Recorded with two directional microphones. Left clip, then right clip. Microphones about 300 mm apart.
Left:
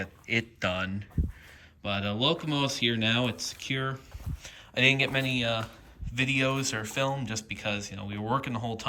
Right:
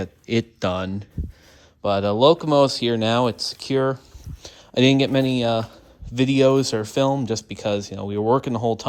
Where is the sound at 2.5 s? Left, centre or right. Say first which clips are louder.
Right 11 dB; centre.